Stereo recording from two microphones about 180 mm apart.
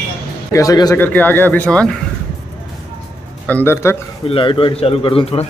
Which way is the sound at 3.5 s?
10° left (ahead or behind).